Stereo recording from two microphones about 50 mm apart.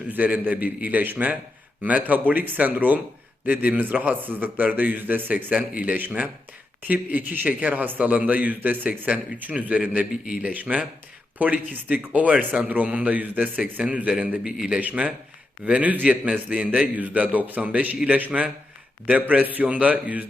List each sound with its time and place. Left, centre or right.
0.1 s a man's voice: right
19.3 s a man's voice: right